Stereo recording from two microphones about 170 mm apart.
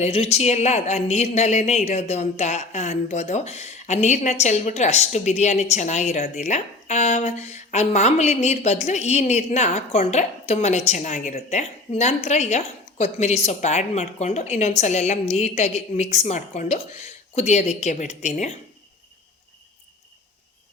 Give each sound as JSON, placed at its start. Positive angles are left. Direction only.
{"t": 0.0, "sound": "a woman's voice", "side_deg": 40}